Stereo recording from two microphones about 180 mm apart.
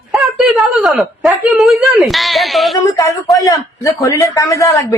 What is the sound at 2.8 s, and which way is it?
A man's voice, 20° left (ahead or behind).